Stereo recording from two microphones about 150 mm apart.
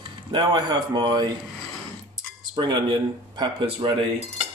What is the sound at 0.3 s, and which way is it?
A man's voice, 30° right (ahead or behind).